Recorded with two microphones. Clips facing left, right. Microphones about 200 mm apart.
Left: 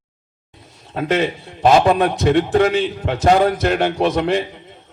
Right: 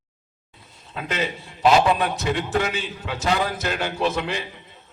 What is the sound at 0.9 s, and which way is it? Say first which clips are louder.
A man's voice: left 9 dB; 50° left (ahead or behind).